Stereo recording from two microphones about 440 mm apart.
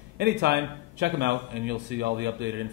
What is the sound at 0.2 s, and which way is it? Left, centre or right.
Speech, right.